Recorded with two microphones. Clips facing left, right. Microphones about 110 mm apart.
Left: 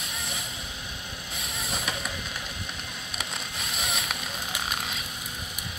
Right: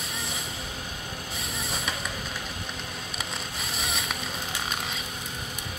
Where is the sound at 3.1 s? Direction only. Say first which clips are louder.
Left 1 dB; centre (ahead or behind).